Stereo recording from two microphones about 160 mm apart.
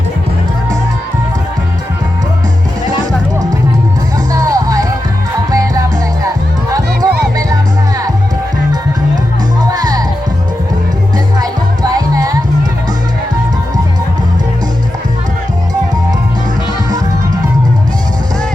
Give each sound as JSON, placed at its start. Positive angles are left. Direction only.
{"t": 4.3, "sound": "music", "side_deg": -25}
{"t": 9.6, "sound": "music", "side_deg": -25}
{"t": 11.3, "sound": "music", "side_deg": -25}